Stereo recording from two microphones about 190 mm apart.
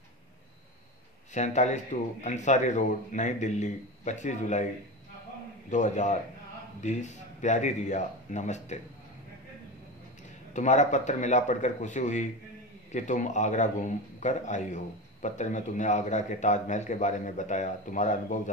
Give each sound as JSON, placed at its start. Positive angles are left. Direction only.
{"t": 1.3, "sound": "a man's voice", "side_deg": 40}
{"t": 5.7, "sound": "a man's voice", "side_deg": 40}
{"t": 10.5, "sound": "a man's voice", "side_deg": 40}